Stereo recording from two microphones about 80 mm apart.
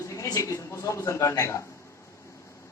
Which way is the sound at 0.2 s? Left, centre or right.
Left.